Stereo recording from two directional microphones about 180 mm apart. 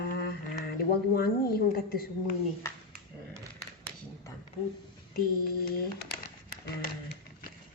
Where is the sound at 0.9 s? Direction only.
60° left (ahead or behind).